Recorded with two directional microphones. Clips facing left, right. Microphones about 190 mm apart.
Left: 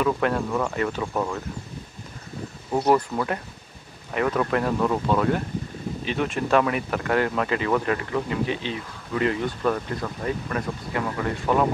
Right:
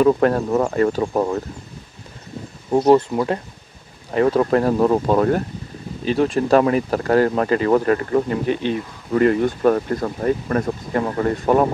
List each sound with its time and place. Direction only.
0.0 s speech: 40° right (ahead or behind)
2.9 s speech: 25° right (ahead or behind); by 11.6 s 40° right (ahead or behind)